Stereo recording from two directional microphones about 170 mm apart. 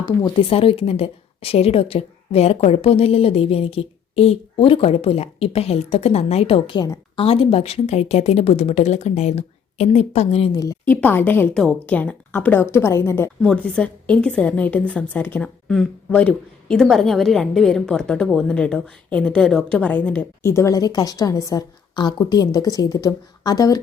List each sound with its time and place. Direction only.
0.0 s a woman's voice: 25° left (ahead or behind)
10.5 s a woman's voice: 20° left (ahead or behind)